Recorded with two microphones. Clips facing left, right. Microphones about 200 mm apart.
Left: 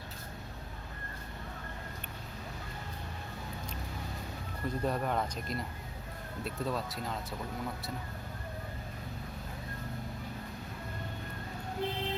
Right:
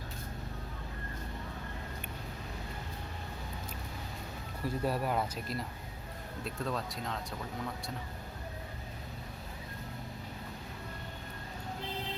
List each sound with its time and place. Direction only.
4.6 s speech: 5° right (ahead or behind)